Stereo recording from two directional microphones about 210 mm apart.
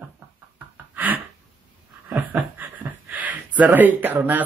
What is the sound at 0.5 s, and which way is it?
Gasp, 10° right (ahead or behind).